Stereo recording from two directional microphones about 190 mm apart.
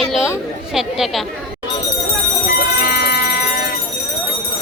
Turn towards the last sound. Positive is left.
turn(degrees=55)  # may be behind; listen again after turning